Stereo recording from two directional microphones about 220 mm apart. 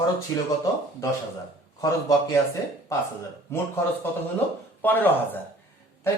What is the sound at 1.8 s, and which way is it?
Speech, 15° left (ahead or behind).